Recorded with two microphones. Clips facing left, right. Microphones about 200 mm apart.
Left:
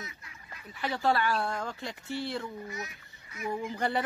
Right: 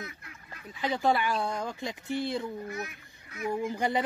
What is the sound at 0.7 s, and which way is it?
Speech, 15° right (ahead or behind).